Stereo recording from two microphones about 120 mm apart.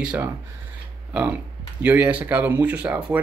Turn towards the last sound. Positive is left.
turn(degrees=-10)  # may be behind; listen again after turning